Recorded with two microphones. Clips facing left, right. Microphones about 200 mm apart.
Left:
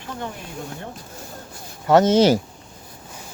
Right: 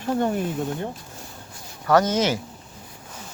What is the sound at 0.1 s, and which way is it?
Speech, 45° right (ahead or behind).